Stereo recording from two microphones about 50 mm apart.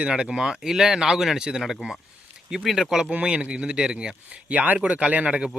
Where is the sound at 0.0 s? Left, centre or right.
Centre.